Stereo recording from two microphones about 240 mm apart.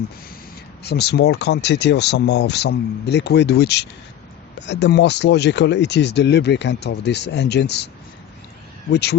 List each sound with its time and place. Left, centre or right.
0.9 s speech: left
8.9 s speech: left